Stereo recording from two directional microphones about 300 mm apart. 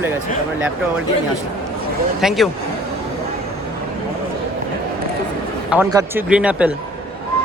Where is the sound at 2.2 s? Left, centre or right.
Centre.